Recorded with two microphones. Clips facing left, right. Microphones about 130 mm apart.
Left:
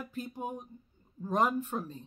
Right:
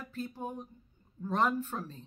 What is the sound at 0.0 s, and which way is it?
Speech, 15° left (ahead or behind).